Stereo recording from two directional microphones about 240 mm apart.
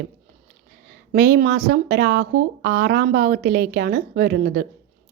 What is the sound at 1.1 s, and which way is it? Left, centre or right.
A woman's voice, right.